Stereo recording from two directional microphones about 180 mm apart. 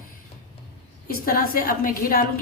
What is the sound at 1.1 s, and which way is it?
A woman's voice, 55° left (ahead or behind).